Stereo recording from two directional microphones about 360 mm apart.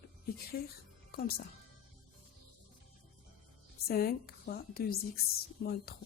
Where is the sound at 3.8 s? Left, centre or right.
Left.